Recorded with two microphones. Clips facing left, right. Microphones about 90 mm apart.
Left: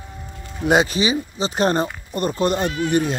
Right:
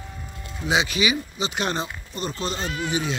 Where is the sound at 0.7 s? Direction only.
40° left (ahead or behind).